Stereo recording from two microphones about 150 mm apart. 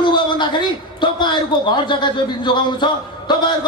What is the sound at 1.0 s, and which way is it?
A man's voice, 30° left (ahead or behind).